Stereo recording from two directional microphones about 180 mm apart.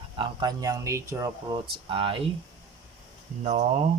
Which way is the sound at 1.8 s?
30° right (ahead or behind).